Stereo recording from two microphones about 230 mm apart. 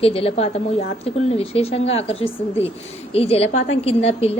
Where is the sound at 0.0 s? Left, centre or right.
Left.